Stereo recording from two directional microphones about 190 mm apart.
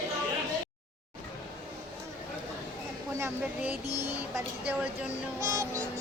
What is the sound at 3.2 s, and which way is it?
Speech, 10° right (ahead or behind).